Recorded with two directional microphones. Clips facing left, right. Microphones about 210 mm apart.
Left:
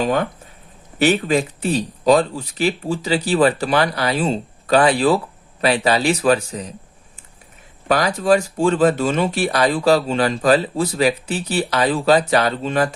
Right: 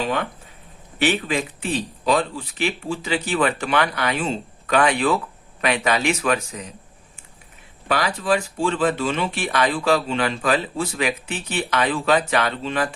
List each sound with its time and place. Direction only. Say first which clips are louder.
0.0 s speech: left 5 dB; 40° left (ahead or behind)
7.9 s speech: left 5 dB; 40° left (ahead or behind)